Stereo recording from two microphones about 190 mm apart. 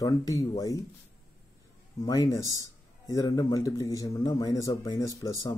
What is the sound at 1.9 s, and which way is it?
A man's voice, 15° left (ahead or behind).